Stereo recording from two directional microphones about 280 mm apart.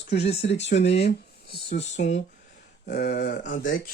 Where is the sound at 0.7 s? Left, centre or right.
Left.